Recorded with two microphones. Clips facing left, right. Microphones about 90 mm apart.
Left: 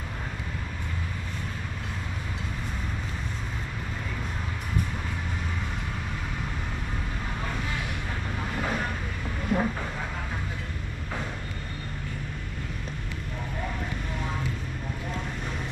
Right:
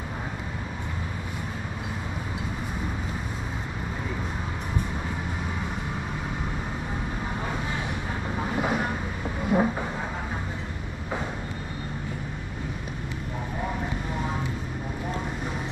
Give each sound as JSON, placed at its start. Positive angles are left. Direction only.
{"t": 8.4, "sound": "vehicle", "side_deg": -15}